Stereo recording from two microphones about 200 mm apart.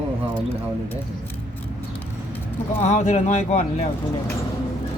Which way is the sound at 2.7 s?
30° left (ahead or behind).